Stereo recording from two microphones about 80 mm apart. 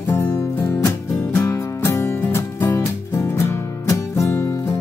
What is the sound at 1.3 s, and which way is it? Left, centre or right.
Music, left.